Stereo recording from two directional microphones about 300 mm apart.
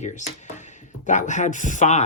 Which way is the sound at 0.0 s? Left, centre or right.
Left.